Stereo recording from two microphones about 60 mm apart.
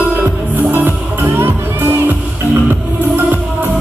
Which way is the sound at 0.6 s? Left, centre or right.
Right.